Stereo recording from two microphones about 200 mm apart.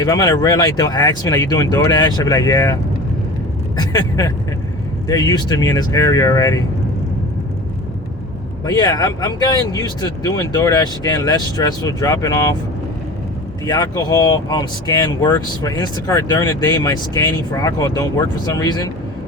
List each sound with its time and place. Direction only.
0.0 s speech: 15° left (ahead or behind)
3.8 s speech: 20° left (ahead or behind)
8.6 s speech: 20° left (ahead or behind)
13.7 s speech: 20° left (ahead or behind)